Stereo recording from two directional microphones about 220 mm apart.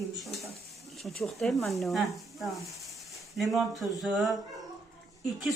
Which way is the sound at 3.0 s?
Centre (ahead or behind).